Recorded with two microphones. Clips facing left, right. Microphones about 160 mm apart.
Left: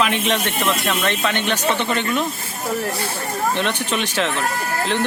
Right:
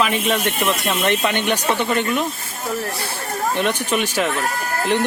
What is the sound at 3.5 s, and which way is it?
Speech, 10° right (ahead or behind).